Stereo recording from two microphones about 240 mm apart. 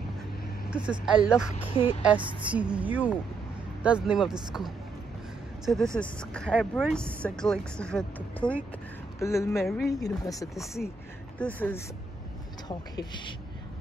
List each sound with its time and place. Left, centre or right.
0.7 s speech: centre
1.8 s speech: left
2.0 s speech: centre
5.9 s speech: centre
9.6 s speech: centre
9.9 s speech: centre
10.8 s speech: centre